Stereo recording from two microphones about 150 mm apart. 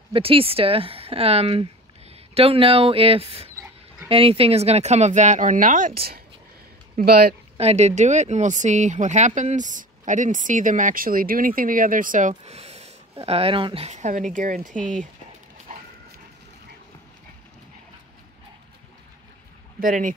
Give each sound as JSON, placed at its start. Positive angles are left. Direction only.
{"t": 0.1, "sound": "speech", "side_deg": -40}
{"t": 7.5, "sound": "speech", "side_deg": -45}
{"t": 19.8, "sound": "speech", "side_deg": -65}